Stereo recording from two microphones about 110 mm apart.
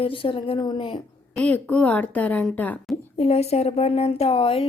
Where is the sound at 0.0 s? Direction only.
55° left (ahead or behind).